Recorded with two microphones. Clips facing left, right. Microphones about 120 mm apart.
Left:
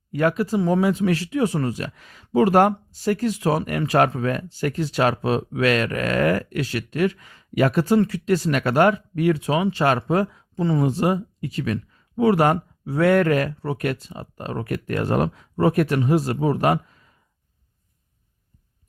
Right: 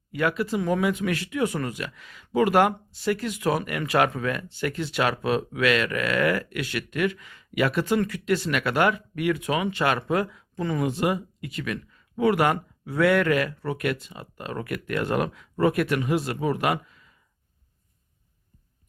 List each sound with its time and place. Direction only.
0.1 s speech: 40° left (ahead or behind)